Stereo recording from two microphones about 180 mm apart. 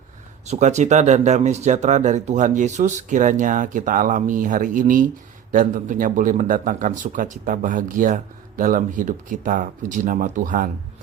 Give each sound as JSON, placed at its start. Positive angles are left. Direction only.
{"t": 0.4, "sound": "speech", "side_deg": -40}